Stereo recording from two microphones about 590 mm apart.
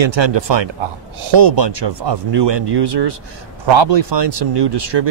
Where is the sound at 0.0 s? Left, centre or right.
Right.